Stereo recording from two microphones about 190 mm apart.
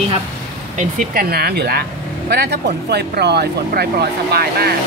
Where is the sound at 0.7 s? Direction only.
45° right (ahead or behind).